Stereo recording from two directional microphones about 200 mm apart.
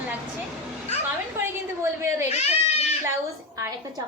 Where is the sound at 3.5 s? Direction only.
15° right (ahead or behind).